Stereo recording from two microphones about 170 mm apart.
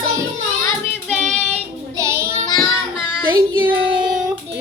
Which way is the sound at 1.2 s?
45° right (ahead or behind).